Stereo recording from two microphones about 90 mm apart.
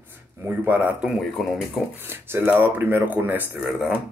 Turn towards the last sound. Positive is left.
turn(degrees=-5)  # may be behind; listen again after turning